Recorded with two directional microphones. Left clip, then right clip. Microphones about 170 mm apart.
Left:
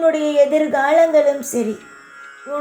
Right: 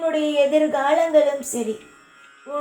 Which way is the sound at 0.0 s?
35° left (ahead or behind).